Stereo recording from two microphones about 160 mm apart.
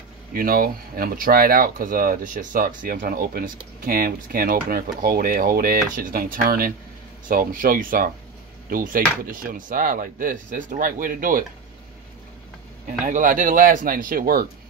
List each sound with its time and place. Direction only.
0.3 s speech: 65° right (ahead or behind)
13.0 s speech: 55° right (ahead or behind)